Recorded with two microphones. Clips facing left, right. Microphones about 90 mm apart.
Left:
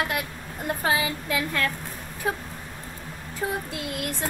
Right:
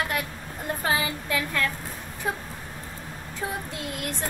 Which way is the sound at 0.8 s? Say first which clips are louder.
Left 1 dB; 20° left (ahead or behind).